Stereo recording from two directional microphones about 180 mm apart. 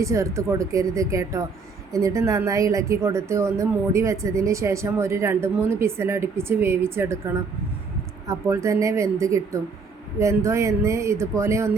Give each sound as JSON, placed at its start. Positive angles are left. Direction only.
{"t": 0.0, "sound": "a woman's voice", "side_deg": -15}
{"t": 8.3, "sound": "a woman's voice", "side_deg": -15}